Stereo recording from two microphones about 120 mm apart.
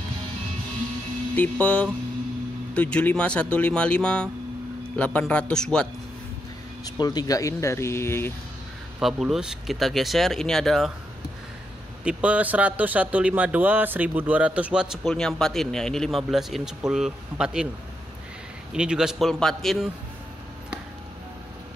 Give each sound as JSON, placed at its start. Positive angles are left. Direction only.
{"t": 1.3, "sound": "speech", "side_deg": 10}
{"t": 7.0, "sound": "speech", "side_deg": 35}
{"t": 9.0, "sound": "speech", "side_deg": -5}
{"t": 12.0, "sound": "speech", "side_deg": -10}
{"t": 15.0, "sound": "speech", "side_deg": 5}
{"t": 18.7, "sound": "speech", "side_deg": -5}